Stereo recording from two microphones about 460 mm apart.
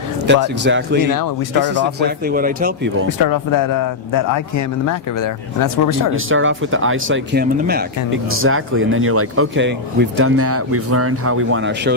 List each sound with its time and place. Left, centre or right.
0.4 s speech: right
1.1 s speech: left
1.7 s speech: right
3.2 s speech: left
6.1 s speech: right